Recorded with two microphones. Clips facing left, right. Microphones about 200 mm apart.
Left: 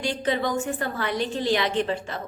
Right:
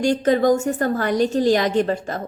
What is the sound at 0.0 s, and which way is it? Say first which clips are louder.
A woman's voice: right 9 dB; 45° right (ahead or behind).